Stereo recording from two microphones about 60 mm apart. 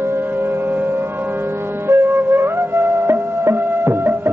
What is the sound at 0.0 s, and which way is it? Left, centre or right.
Music, right.